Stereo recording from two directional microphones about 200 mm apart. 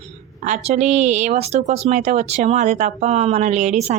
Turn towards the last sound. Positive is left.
turn(degrees=-35)  # may be behind; listen again after turning